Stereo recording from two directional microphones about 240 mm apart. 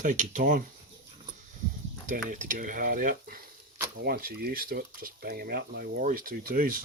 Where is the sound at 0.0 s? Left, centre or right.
Right.